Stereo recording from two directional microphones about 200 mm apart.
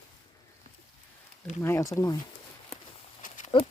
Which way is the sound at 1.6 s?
15° left (ahead or behind).